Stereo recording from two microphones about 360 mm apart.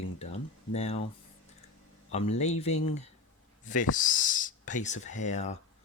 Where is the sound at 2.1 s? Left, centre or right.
Centre.